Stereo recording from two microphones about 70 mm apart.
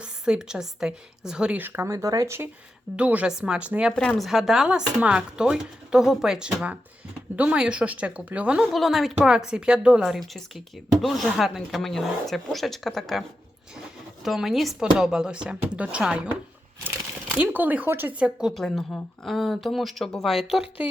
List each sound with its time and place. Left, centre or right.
0.0 s a woman's voice: centre
1.5 s speech: right
2.0 s speech: right
2.9 s a woman's voice: centre
4.2 s speech: centre
7.3 s a woman's voice: right
8.7 s speech: centre
10.1 s speech: centre
14.3 s speech: centre
17.3 s a woman's voice: right
18.1 s speech: centre
18.5 s speech: centre